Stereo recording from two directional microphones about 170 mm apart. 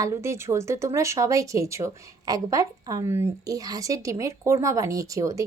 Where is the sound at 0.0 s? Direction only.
15° right (ahead or behind).